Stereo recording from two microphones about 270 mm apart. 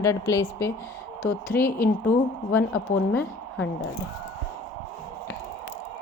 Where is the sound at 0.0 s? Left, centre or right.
Centre.